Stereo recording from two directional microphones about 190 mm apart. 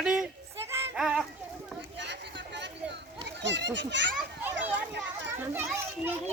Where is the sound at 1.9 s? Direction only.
65° right (ahead or behind).